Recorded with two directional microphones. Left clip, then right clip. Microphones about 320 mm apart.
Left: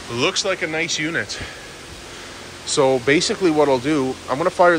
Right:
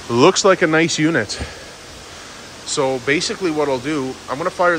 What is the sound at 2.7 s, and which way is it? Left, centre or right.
Speech, centre.